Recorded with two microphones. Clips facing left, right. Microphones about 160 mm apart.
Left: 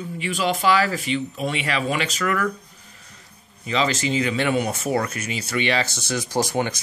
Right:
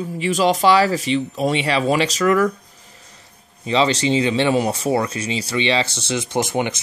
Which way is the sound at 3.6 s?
30° right (ahead or behind).